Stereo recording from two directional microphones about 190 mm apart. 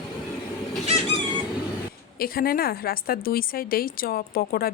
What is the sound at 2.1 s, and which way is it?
Speech, 50° left (ahead or behind).